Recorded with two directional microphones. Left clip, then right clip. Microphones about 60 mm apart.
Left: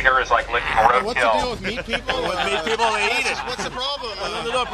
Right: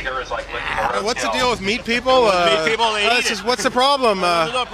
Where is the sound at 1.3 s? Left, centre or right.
Right.